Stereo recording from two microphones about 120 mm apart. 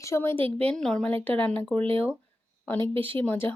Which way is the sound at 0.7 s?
5° left (ahead or behind).